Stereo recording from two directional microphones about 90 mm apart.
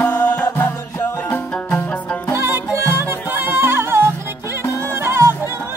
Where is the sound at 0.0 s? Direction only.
25° left (ahead or behind).